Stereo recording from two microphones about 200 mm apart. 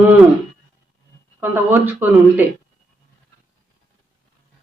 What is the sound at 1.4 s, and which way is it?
Speech, 10° right (ahead or behind).